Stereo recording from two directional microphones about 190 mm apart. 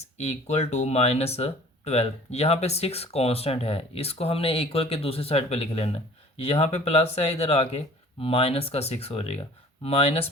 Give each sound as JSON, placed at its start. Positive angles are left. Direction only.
{"t": 0.0, "sound": "speech", "side_deg": 35}